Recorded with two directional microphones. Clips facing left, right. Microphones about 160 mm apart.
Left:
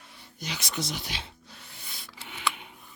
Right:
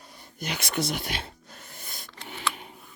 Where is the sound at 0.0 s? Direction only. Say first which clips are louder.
Right 4 dB; 45° right (ahead or behind).